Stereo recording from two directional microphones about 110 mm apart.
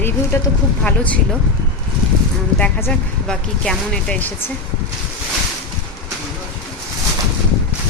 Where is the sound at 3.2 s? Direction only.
5° left (ahead or behind).